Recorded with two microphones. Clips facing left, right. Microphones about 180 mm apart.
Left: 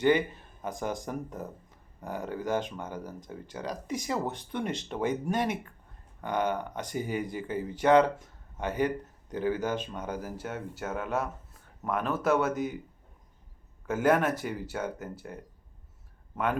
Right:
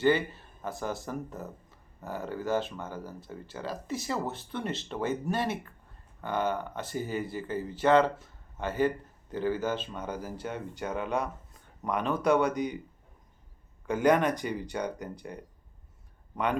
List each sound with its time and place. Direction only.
0.6 s speech: 15° left (ahead or behind)
13.8 s speech: 5° left (ahead or behind)